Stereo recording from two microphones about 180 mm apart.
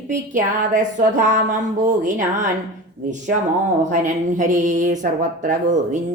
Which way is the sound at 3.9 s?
45° right (ahead or behind).